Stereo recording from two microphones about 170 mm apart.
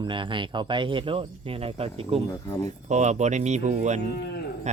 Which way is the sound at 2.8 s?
45° right (ahead or behind).